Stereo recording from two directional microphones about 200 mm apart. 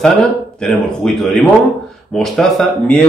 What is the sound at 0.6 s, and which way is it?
Speech, centre (ahead or behind).